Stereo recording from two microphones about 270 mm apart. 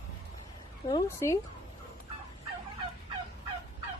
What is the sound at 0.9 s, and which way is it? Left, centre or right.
Fowl, centre.